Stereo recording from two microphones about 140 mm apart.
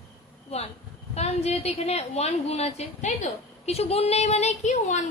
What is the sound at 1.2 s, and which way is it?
A woman's voice, 50° left (ahead or behind).